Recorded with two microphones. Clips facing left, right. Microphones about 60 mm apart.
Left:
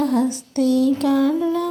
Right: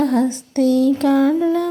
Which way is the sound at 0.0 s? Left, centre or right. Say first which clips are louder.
Right 2 dB; right.